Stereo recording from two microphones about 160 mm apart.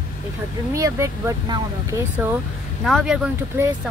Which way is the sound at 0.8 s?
20° right (ahead or behind).